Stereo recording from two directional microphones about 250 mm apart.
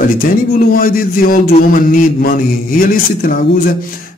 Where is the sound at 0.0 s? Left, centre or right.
Left.